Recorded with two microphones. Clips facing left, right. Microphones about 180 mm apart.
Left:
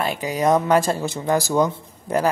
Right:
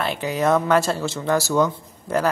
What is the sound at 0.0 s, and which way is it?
A man's voice, 10° left (ahead or behind).